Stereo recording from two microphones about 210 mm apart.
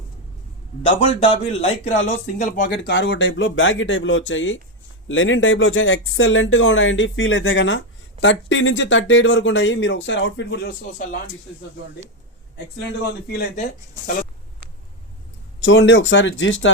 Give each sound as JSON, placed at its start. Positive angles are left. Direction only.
{"t": 0.8, "sound": "a man's voice", "side_deg": 30}
{"t": 2.7, "sound": "speech", "side_deg": 55}
{"t": 13.2, "sound": "speech", "side_deg": 50}
{"t": 15.6, "sound": "speech", "side_deg": 60}